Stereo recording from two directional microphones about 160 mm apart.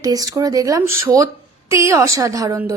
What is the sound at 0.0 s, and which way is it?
A woman's voice, 25° right (ahead or behind).